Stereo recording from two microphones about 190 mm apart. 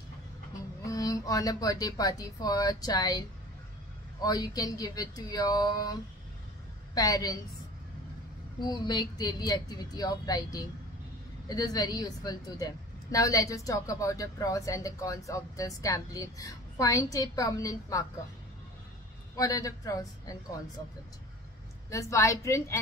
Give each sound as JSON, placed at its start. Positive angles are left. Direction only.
{"t": 0.8, "sound": "speech", "side_deg": 20}
{"t": 7.0, "sound": "speech", "side_deg": 20}
{"t": 8.5, "sound": "a woman's voice", "side_deg": 20}
{"t": 19.3, "sound": "a woman's voice", "side_deg": 20}
{"t": 21.9, "sound": "a woman's voice", "side_deg": 15}